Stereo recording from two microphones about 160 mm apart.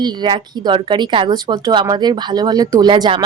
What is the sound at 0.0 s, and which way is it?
Speech, 25° right (ahead or behind).